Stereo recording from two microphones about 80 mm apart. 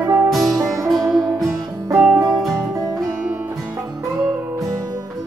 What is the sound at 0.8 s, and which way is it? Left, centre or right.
Music, centre.